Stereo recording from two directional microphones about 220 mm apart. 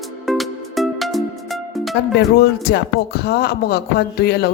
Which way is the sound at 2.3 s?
45° left (ahead or behind).